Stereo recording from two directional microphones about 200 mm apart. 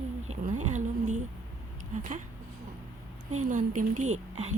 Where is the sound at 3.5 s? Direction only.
40° right (ahead or behind).